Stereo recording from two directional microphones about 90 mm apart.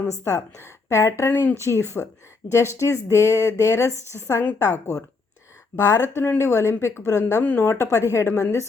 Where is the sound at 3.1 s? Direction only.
30° left (ahead or behind).